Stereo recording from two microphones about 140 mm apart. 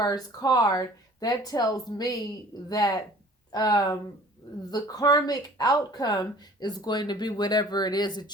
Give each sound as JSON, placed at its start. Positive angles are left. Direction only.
{"t": 0.0, "sound": "speech", "side_deg": 25}